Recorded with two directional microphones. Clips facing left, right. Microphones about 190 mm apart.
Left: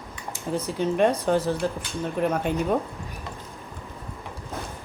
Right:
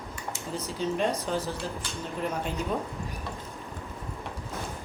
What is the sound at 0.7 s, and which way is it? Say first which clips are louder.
Speech: left 6 dB; 55° left (ahead or behind).